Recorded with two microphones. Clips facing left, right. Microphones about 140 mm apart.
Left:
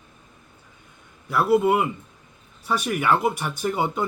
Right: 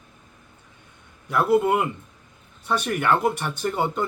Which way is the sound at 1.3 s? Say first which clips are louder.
Left 1 dB; 5° left (ahead or behind).